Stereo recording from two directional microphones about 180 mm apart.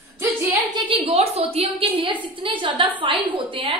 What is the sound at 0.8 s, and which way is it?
A woman's voice, 30° right (ahead or behind).